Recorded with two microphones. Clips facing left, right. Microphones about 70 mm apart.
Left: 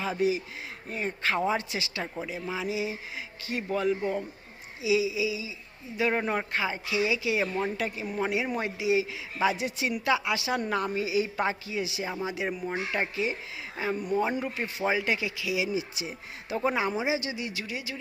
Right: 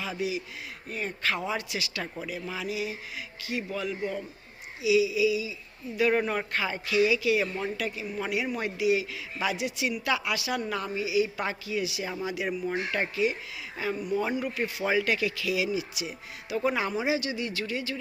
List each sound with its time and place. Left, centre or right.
0.0 s a man's voice: left
3.4 s a woman's voice: left
13.9 s speech: left
14.3 s a man's voice: left